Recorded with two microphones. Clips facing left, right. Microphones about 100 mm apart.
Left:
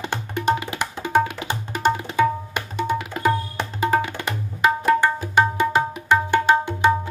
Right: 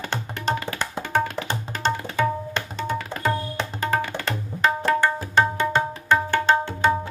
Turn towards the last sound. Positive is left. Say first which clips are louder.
# left 2 dB
turn(degrees=15)  # may be behind; listen again after turning